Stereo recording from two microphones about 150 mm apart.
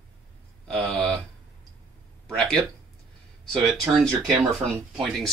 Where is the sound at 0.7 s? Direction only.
5° left (ahead or behind).